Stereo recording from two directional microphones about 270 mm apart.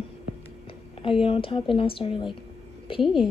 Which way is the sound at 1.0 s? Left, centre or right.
Centre.